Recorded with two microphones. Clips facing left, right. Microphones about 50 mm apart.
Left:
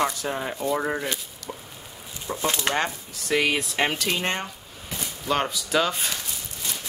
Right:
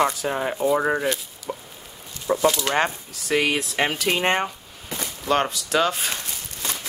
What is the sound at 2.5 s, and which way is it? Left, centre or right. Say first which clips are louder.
Speech: right 2 dB; left.